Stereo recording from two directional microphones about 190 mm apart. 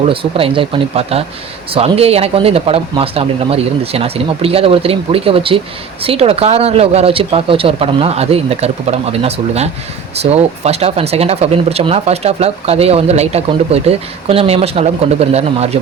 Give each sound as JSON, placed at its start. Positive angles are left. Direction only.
{"t": 0.1, "sound": "speech", "side_deg": -30}